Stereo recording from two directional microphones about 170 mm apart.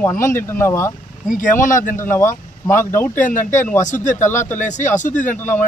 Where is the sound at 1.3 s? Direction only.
50° left (ahead or behind).